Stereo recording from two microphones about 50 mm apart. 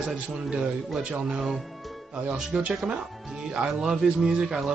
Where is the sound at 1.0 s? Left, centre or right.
Right.